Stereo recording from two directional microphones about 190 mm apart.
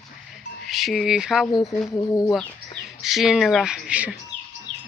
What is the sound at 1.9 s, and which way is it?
Speech, 15° left (ahead or behind).